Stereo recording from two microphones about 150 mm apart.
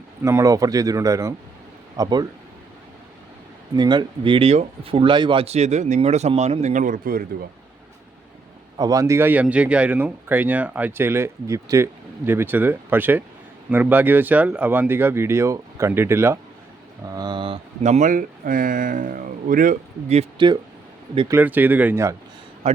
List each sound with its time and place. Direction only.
0.2 s speech: 20° right (ahead or behind)
3.8 s speech: 30° right (ahead or behind); by 7.3 s 75° right (ahead or behind)
8.8 s speech: 20° right (ahead or behind)
17.1 s speech: 30° right (ahead or behind)
17.8 s speech: 55° right (ahead or behind)
20.4 s speech: 30° right (ahead or behind)
21.2 s speech: 15° right (ahead or behind)
22.6 s speech: 45° right (ahead or behind)